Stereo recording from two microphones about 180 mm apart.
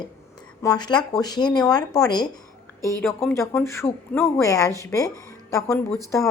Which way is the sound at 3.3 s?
15° left (ahead or behind).